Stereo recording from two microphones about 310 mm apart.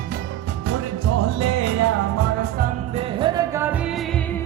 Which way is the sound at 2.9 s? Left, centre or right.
Centre.